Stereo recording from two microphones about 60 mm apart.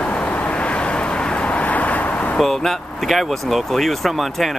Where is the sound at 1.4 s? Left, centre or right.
Left.